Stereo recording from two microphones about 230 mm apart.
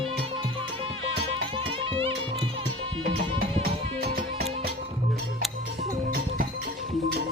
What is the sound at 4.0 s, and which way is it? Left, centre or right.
Music, right.